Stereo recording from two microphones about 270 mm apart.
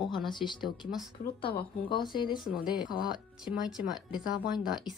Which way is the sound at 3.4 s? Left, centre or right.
Centre.